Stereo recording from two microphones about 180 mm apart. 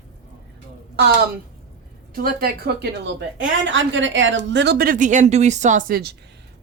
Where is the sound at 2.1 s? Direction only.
55° right (ahead or behind).